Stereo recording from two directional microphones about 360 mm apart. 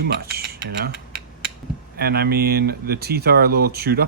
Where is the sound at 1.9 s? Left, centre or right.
Right.